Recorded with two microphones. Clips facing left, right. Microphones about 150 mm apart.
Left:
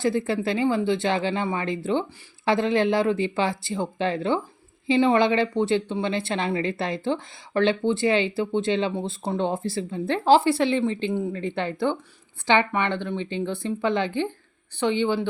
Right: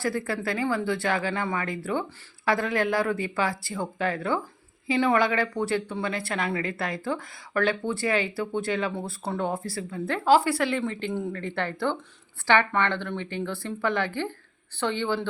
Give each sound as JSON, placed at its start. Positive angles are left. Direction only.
{"t": 0.0, "sound": "speech", "side_deg": 20}